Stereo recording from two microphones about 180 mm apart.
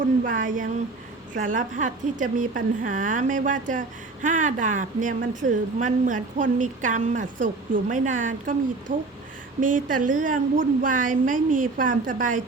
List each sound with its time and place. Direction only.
0.3 s a woman's voice: 45° right (ahead or behind)